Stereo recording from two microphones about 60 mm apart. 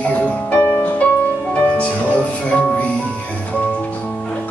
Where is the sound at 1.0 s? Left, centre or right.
Centre.